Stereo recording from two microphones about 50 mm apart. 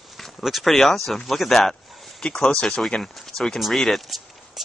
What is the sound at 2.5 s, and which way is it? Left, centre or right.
Speech, left.